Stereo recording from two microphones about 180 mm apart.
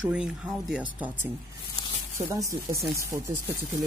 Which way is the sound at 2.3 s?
15° right (ahead or behind).